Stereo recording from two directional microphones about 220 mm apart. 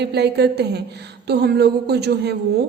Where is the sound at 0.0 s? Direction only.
50° right (ahead or behind).